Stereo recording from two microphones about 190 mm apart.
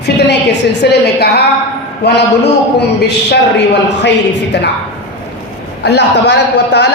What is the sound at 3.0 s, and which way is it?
Speech, 65° left (ahead or behind).